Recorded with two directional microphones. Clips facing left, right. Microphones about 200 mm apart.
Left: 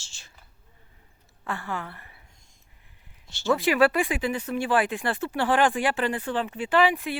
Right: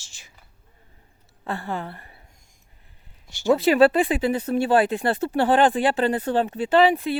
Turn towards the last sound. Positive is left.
turn(degrees=-30)  # may be behind; listen again after turning